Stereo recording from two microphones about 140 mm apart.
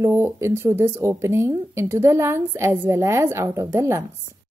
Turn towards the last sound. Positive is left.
turn(degrees=-20)  # may be behind; listen again after turning